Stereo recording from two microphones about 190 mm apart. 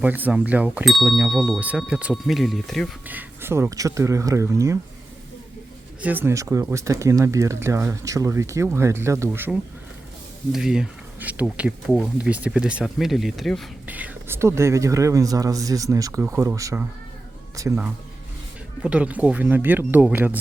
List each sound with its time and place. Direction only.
0.0 s speech: 10° right (ahead or behind)
3.1 s speech: 10° right (ahead or behind)
6.0 s speech: 10° right (ahead or behind)